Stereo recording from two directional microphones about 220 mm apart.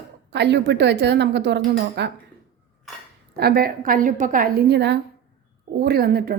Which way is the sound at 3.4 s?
45° right (ahead or behind).